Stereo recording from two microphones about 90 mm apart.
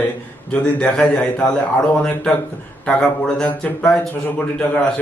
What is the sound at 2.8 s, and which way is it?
Speech, 10° left (ahead or behind).